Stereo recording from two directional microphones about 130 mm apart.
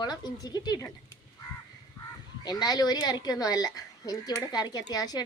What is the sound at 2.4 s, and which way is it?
A woman's voice, 30° left (ahead or behind).